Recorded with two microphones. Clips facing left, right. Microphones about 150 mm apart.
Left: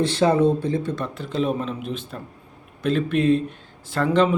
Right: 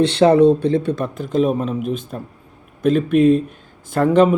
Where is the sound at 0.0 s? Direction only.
65° right (ahead or behind).